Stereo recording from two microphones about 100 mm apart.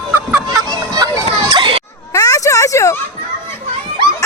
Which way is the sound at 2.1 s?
35° left (ahead or behind).